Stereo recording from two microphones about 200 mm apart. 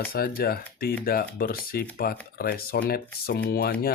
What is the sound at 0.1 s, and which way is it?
Speech, 50° left (ahead or behind).